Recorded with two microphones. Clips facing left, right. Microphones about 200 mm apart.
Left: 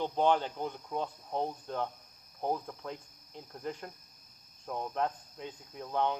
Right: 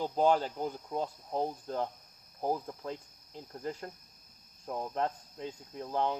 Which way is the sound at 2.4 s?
5° right (ahead or behind).